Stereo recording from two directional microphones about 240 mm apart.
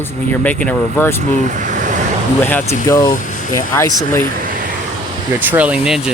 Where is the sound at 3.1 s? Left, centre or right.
Left.